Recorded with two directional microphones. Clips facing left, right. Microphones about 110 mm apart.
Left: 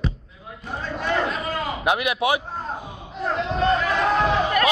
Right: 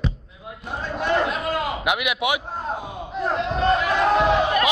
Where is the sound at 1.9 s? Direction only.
30° left (ahead or behind).